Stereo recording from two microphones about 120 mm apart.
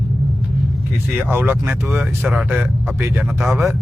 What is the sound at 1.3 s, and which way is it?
Speech, 15° right (ahead or behind).